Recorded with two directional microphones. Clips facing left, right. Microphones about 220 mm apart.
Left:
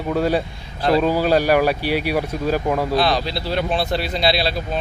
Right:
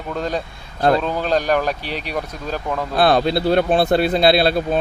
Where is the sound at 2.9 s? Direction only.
50° right (ahead or behind).